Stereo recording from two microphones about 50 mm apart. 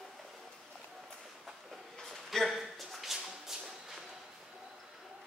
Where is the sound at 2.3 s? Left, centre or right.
Centre.